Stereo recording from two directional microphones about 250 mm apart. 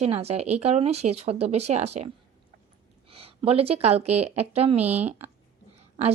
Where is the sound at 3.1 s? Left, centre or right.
Right.